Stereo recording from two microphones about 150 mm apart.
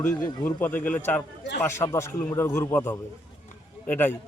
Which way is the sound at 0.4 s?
10° left (ahead or behind).